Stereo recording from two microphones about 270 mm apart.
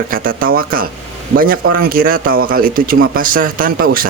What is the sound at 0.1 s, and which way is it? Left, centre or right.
Speech, right.